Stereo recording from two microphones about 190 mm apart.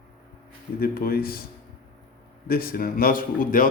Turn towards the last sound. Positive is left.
turn(degrees=45)  # may be behind; listen again after turning